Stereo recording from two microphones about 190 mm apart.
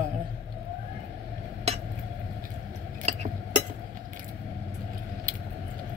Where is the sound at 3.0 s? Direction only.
35° right (ahead or behind).